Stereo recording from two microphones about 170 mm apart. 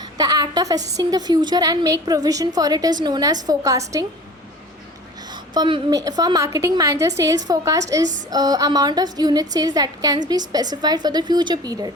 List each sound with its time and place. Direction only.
0.2 s a woman's voice: 25° right (ahead or behind)
5.5 s a woman's voice: 25° right (ahead or behind)